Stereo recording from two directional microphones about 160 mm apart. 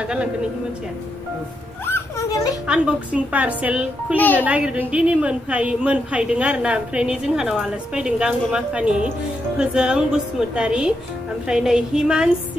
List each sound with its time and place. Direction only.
0.0 s a woman's voice: 5° right (ahead or behind)
1.9 s a sound: 15° left (ahead or behind)
2.6 s a woman's voice: 5° right (ahead or behind)